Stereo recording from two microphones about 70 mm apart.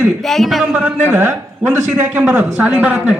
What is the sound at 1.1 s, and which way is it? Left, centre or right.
Speech, right.